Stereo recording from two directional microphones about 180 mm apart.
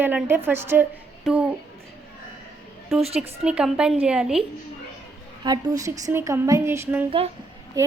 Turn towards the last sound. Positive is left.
turn(degrees=-15)  # may be behind; listen again after turning